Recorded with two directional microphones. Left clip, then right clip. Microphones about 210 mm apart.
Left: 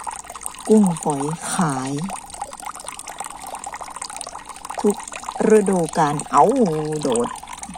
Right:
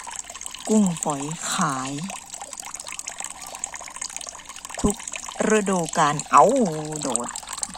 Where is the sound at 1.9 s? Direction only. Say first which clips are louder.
Left 5 dB; 20° right (ahead or behind).